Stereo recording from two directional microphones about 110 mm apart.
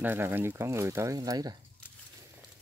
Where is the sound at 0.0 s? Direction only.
20° right (ahead or behind); by 1.6 s 35° right (ahead or behind).